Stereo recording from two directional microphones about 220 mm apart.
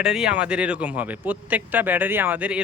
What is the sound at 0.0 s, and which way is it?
A man's voice, 5° right (ahead or behind).